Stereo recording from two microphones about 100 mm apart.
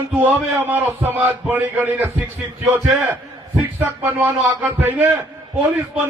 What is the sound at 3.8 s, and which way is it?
A man's voice, 20° right (ahead or behind).